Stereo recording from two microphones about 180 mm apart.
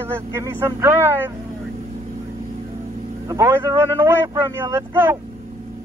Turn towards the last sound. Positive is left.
turn(degrees=-15)  # may be behind; listen again after turning